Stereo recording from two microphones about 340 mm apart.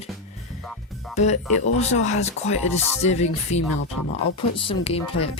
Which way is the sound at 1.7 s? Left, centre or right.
Centre.